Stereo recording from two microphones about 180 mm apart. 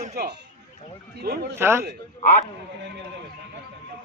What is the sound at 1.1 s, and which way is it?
Speech, 60° right (ahead or behind).